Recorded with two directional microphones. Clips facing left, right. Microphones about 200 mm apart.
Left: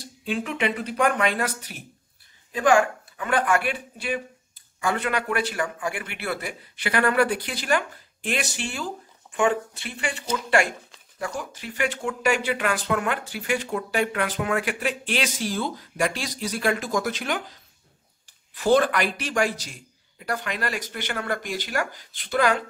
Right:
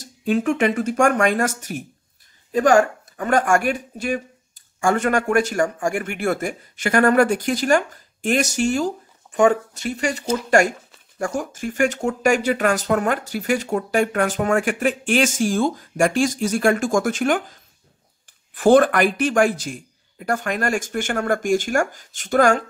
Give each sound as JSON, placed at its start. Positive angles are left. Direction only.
{"t": 0.0, "sound": "speech", "side_deg": -45}